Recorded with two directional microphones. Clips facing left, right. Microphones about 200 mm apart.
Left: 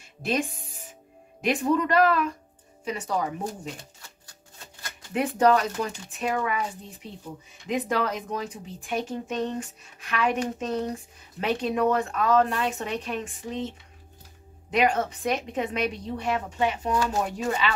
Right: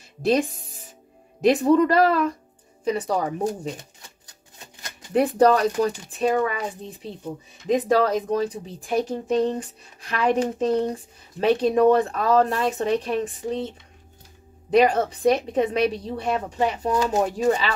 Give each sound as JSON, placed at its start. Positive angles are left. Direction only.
{"t": 0.2, "sound": "speech", "side_deg": -35}
{"t": 5.1, "sound": "speech", "side_deg": -35}
{"t": 7.6, "sound": "speech", "side_deg": -35}
{"t": 14.7, "sound": "speech", "side_deg": -35}